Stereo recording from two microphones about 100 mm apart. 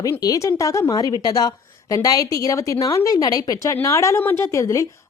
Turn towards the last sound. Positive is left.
turn(degrees=35)  # may be behind; listen again after turning